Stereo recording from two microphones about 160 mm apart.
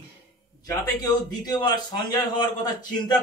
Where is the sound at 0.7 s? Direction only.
25° left (ahead or behind).